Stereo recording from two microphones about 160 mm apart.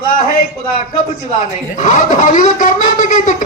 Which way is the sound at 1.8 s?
50° left (ahead or behind).